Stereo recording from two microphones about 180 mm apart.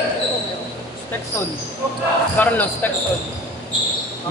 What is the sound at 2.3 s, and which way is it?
Speech, 10° left (ahead or behind).